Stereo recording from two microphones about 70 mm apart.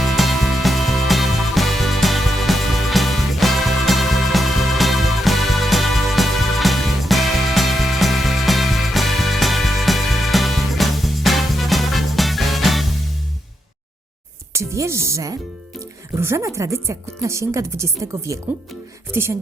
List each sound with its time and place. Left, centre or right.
0.0 s music: centre
14.5 s music: right
16.2 s speech: right